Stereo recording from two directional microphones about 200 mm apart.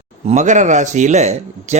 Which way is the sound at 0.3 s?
35° right (ahead or behind).